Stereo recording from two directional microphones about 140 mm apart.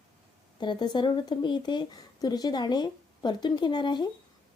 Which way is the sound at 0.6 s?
35° left (ahead or behind).